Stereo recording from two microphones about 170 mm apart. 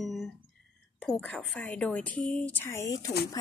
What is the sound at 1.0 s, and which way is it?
A woman's voice, 5° left (ahead or behind).